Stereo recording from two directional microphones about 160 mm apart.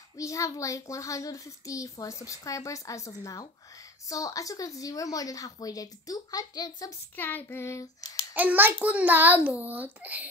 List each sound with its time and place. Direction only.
0.2 s a child's voice: 20° left (ahead or behind)
7.2 s child singing: 10° left (ahead or behind)
8.4 s a child's voice: 10° right (ahead or behind)